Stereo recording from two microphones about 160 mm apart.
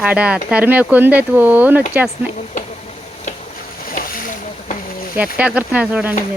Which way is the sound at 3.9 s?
60° left (ahead or behind).